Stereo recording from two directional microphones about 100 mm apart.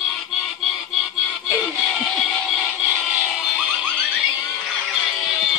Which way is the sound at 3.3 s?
5° right (ahead or behind).